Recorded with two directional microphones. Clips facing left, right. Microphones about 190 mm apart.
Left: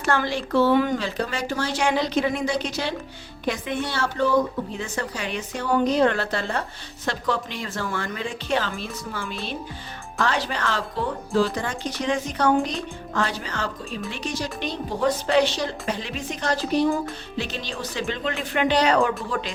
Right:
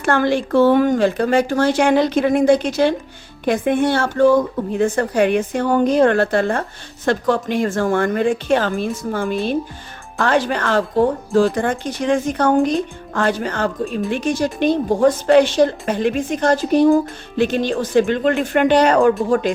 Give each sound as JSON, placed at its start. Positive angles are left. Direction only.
{"t": 0.0, "sound": "speech", "side_deg": -55}